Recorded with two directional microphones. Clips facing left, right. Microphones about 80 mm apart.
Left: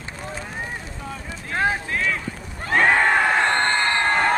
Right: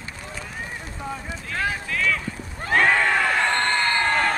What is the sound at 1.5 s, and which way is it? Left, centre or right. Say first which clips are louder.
Clip-clop: left 4 dB; left.